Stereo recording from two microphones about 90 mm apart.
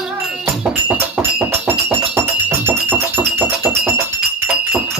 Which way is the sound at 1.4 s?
25° right (ahead or behind).